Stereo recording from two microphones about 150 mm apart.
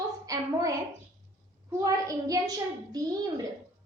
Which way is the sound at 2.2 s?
25° right (ahead or behind).